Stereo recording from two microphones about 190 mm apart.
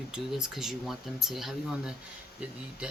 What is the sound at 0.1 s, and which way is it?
Speech, 5° right (ahead or behind).